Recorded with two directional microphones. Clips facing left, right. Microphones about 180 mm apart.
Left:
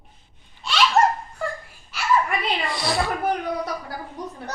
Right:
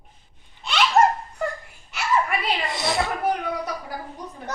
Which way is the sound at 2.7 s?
20° right (ahead or behind).